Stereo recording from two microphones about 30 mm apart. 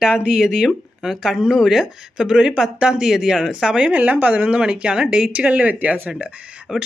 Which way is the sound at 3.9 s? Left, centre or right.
Right.